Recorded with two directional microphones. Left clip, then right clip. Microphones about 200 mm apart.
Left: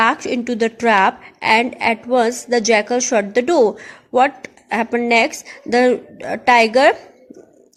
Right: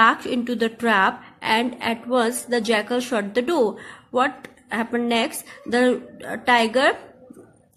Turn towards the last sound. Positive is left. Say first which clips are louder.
# left 6 dB
turn(degrees=25)  # may be behind; listen again after turning